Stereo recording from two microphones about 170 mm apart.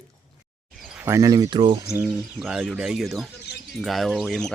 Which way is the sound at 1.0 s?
20° right (ahead or behind).